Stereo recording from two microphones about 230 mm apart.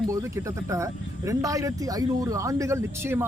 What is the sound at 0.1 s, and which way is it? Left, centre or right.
Speech, centre.